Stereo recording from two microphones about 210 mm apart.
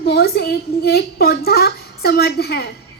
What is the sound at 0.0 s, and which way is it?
A woman's voice, 50° left (ahead or behind).